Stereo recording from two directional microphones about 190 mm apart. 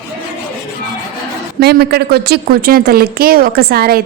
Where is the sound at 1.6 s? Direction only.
60° right (ahead or behind).